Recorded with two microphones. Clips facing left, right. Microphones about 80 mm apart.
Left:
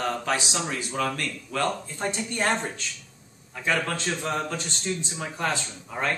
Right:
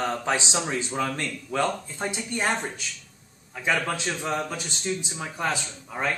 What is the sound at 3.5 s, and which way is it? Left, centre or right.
A man's voice, centre.